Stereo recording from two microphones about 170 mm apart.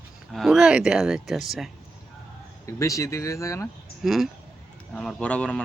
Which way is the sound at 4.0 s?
Centre (ahead or behind).